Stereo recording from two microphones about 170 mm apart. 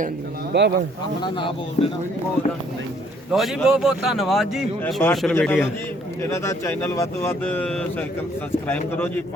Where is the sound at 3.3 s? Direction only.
Centre (ahead or behind).